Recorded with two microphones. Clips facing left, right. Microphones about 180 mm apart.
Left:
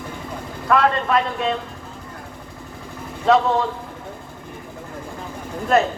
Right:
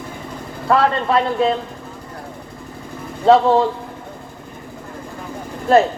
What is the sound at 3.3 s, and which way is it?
Speech, 30° right (ahead or behind).